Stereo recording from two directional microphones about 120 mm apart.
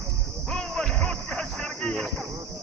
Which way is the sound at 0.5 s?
5° left (ahead or behind).